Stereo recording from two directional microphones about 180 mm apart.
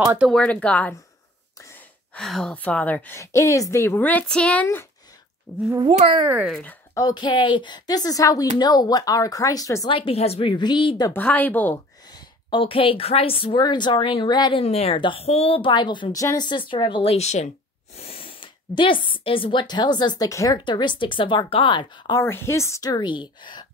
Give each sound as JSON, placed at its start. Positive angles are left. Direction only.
{"t": 0.0, "sound": "speech", "side_deg": -15}
{"t": 0.3, "sound": "a woman's voice", "side_deg": 5}
{"t": 2.1, "sound": "a woman's voice", "side_deg": 0}
{"t": 5.7, "sound": "a child's voice", "side_deg": -25}
{"t": 6.2, "sound": "speech", "side_deg": -10}
{"t": 6.5, "sound": "a woman's voice", "side_deg": 10}
{"t": 9.8, "sound": "a woman's voice", "side_deg": 30}
{"t": 11.1, "sound": "a woman's voice", "side_deg": 10}
{"t": 12.1, "sound": "a woman's voice", "side_deg": 25}
{"t": 22.2, "sound": "a woman's voice", "side_deg": 15}